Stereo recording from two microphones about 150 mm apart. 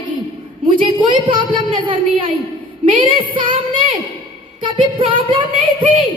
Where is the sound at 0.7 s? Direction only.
35° right (ahead or behind).